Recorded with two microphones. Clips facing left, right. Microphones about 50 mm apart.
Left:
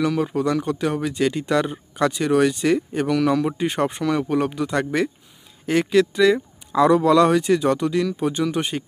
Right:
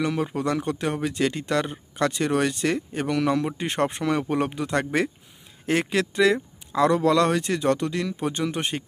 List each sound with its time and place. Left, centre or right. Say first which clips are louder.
0.0 s speech: left 4 dB; centre
4.0 s speech: left 3 dB; centre